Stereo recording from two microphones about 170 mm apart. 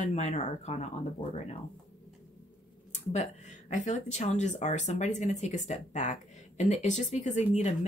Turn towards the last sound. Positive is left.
turn(degrees=40)  # may be behind; listen again after turning